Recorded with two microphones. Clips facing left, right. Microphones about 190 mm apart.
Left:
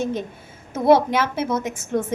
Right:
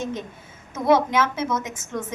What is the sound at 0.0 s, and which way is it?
A woman's voice, 30° left (ahead or behind).